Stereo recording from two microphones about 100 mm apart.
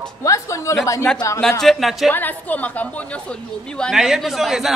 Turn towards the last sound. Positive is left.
turn(degrees=0)  # may be behind; listen again after turning